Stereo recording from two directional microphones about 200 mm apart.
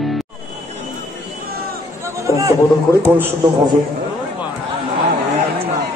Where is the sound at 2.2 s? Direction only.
15° right (ahead or behind).